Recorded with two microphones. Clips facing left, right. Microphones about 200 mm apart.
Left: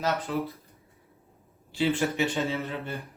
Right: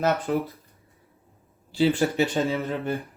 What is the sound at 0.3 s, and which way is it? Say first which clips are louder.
Speech: right 5 dB; 50° right (ahead or behind).